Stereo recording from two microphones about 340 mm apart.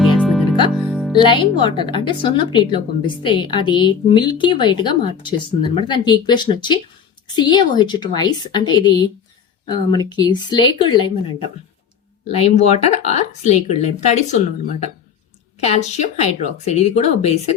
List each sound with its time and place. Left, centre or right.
0.0 s music: centre
1.1 s a woman's voice: centre
12.3 s a woman's voice: centre